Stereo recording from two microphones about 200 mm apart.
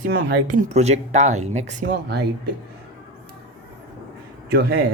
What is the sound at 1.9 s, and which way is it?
Speech, 55° right (ahead or behind).